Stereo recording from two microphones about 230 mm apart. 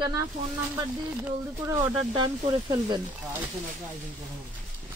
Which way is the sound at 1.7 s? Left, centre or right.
Centre.